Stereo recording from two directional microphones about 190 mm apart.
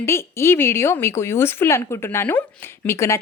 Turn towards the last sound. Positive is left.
turn(degrees=15)  # may be behind; listen again after turning